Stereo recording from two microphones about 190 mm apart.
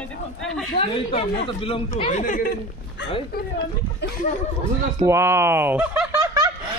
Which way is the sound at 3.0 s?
65° left (ahead or behind).